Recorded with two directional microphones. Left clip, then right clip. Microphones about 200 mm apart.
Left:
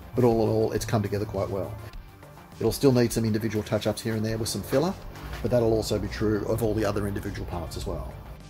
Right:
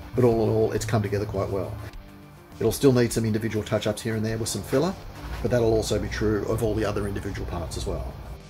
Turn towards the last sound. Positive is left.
turn(degrees=35)  # may be behind; listen again after turning